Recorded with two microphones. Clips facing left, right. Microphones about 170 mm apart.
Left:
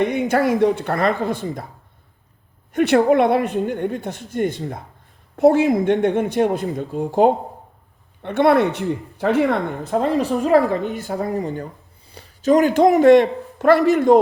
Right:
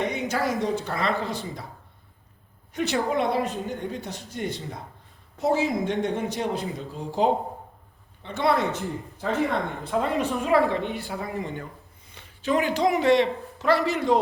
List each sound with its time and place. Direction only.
0.0 s a woman's voice: 55° left (ahead or behind)
2.7 s a woman's voice: 60° left (ahead or behind)
9.8 s speech: 40° left (ahead or behind)